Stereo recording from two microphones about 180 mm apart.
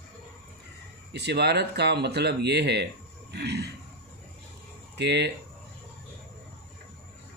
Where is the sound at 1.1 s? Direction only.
65° right (ahead or behind).